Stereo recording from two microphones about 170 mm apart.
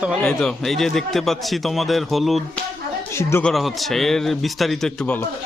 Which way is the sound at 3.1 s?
15° left (ahead or behind).